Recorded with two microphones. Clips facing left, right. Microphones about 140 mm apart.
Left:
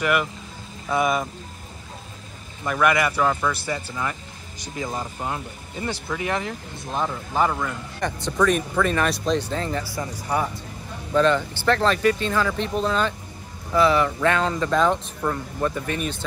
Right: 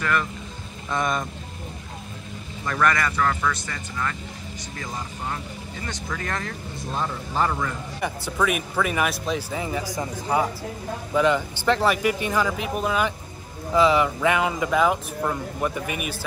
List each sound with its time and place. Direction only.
0.0 s speech: 15° left (ahead or behind)
2.6 s speech: 10° left (ahead or behind)
8.0 s speech: 10° right (ahead or behind)
11.1 s speech: 15° right (ahead or behind)